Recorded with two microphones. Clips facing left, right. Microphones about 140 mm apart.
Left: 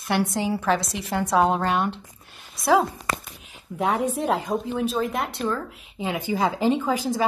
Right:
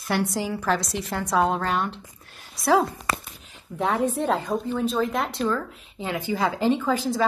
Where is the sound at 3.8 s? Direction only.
10° left (ahead or behind).